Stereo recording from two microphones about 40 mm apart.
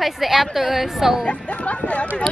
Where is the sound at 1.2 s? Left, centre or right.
Left.